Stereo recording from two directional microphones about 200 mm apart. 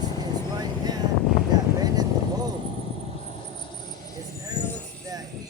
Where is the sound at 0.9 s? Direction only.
20° right (ahead or behind).